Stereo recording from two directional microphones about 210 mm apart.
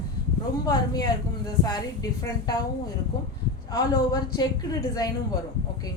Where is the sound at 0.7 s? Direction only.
15° left (ahead or behind).